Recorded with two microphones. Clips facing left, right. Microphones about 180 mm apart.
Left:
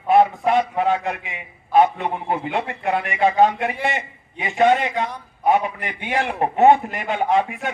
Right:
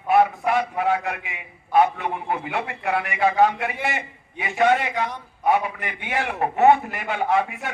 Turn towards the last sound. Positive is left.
turn(degrees=20)  # may be behind; listen again after turning